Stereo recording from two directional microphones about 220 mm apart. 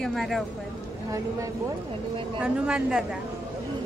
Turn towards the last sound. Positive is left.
turn(degrees=-5)  # may be behind; listen again after turning